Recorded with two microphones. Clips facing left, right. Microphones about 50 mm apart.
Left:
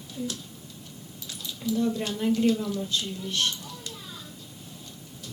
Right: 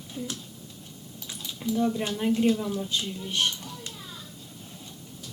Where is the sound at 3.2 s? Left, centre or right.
Centre.